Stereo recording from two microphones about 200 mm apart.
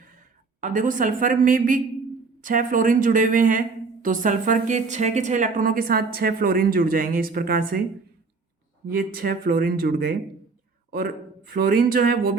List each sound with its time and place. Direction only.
0.6 s a woman's voice: 40° right (ahead or behind)
8.9 s a woman's voice: 45° right (ahead or behind)
11.5 s a woman's voice: 45° right (ahead or behind)